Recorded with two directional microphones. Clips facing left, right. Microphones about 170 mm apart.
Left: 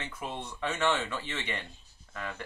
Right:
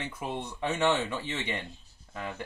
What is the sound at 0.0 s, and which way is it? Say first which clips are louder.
Speech: right 3 dB; 15° right (ahead or behind).